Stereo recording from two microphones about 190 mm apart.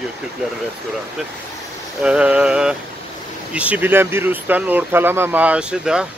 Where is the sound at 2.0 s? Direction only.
5° right (ahead or behind).